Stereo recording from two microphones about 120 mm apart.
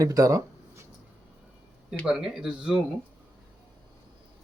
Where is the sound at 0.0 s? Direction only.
30° right (ahead or behind).